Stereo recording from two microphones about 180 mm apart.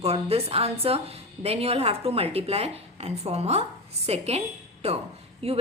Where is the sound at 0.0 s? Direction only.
35° right (ahead or behind).